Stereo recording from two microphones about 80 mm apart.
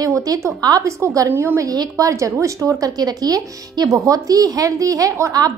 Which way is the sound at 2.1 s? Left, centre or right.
Right.